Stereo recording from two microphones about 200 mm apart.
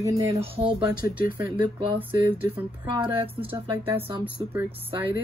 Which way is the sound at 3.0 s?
25° right (ahead or behind).